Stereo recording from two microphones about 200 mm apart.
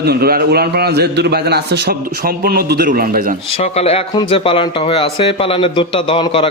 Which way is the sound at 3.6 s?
30° left (ahead or behind).